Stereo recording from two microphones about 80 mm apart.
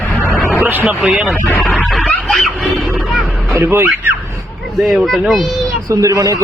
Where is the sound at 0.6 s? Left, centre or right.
Right.